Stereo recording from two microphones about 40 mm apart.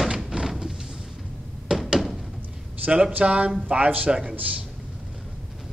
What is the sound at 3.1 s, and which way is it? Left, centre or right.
Speech, right.